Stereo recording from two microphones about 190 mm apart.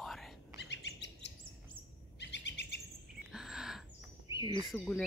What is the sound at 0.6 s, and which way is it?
Chirp, 65° left (ahead or behind).